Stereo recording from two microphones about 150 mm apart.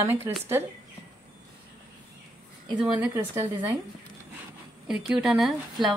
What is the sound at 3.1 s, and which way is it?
Speech, 15° right (ahead or behind).